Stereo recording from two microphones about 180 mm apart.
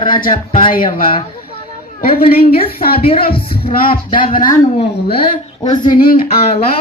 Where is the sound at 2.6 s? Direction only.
55° left (ahead or behind).